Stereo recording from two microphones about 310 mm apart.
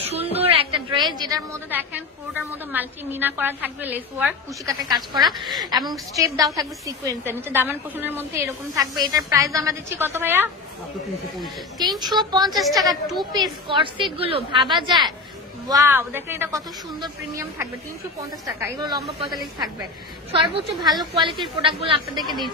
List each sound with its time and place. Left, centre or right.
0.0 s a woman's voice: centre
11.8 s a woman's voice: centre
12.4 s a woman's voice: centre
13.2 s a woman's voice: centre